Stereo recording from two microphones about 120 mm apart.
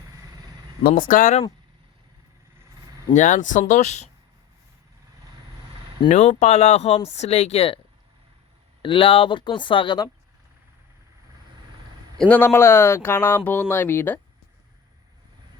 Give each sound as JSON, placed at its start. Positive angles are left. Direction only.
{"t": 1.1, "sound": "speech", "side_deg": 85}
{"t": 3.1, "sound": "speech", "side_deg": 90}
{"t": 6.1, "sound": "speech", "side_deg": 85}
{"t": 8.8, "sound": "speech", "side_deg": 45}
{"t": 12.2, "sound": "speech", "side_deg": 15}